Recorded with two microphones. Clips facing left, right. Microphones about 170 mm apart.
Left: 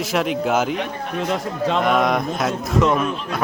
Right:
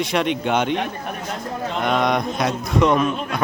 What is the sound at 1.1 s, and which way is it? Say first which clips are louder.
Speech: left 5 dB; 90° left.